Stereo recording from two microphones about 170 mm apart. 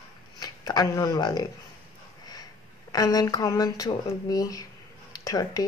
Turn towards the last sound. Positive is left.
turn(degrees=20)  # may be behind; listen again after turning